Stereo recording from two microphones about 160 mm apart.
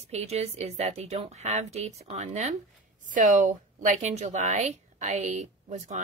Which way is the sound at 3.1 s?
55° right (ahead or behind).